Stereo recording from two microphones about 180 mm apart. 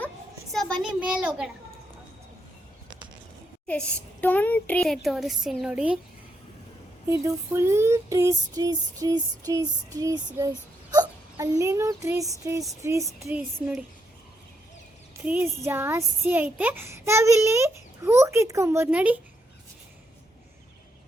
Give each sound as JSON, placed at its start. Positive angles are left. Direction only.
{"t": 0.5, "sound": "a child's voice", "side_deg": 5}
{"t": 3.7, "sound": "a woman's voice", "side_deg": 10}
{"t": 7.1, "sound": "speech", "side_deg": -15}
{"t": 15.2, "sound": "speech", "side_deg": -10}